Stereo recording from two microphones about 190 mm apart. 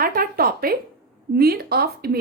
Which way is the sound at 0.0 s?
50° right (ahead or behind).